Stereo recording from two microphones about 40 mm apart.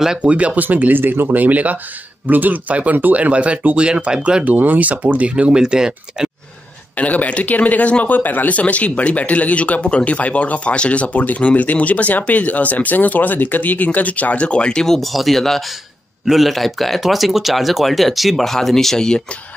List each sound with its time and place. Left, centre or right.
0.2 s speech: right
0.6 s speech: right
1.0 s speech: right
1.3 s speech: right
4.5 s speech: right
5.5 s speech: centre
7.0 s speech: left
8.5 s speech: left; by 15.0 s centre
15.0 s speech: centre
18.9 s speech: centre